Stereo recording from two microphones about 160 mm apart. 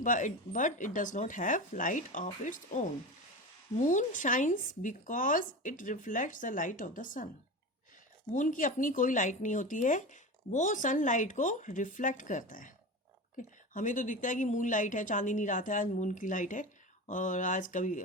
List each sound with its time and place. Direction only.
0.0 s speech: 55° left (ahead or behind)
8.3 s speech: 55° left (ahead or behind)